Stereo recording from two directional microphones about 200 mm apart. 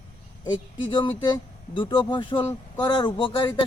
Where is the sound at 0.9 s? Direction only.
25° left (ahead or behind).